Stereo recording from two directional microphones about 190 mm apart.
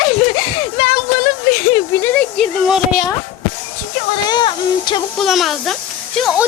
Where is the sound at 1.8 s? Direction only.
15° left (ahead or behind).